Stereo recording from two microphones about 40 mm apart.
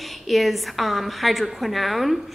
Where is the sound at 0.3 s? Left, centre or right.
Centre.